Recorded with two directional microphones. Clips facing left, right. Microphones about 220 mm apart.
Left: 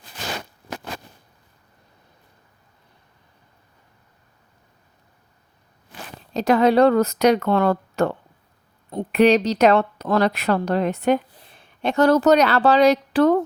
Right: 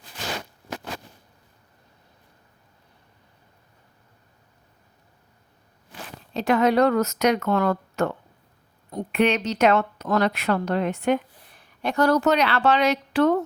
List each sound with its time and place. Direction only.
6.3 s speech: 40° left (ahead or behind)
11.4 s a sound: 25° left (ahead or behind)
12.2 s speech: 40° left (ahead or behind)